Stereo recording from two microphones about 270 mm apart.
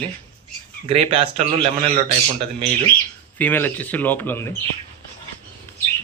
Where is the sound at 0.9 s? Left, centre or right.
Right.